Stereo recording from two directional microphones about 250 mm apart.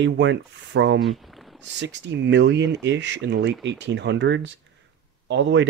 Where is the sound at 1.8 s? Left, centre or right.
Right.